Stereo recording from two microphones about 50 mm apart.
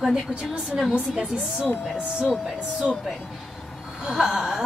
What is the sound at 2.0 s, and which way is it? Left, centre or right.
Speech, right.